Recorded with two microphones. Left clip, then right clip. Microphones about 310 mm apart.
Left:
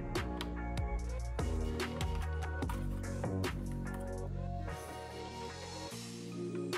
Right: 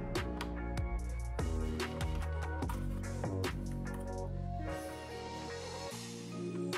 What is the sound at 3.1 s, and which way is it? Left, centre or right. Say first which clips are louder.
Music: even; centre.